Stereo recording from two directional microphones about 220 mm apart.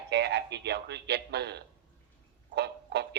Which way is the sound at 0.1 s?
50° right (ahead or behind).